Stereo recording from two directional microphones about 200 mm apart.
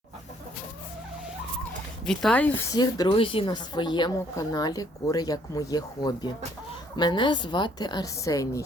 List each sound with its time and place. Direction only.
2.0 s speech: 5° left (ahead or behind)
2.7 s speech: 20° left (ahead or behind)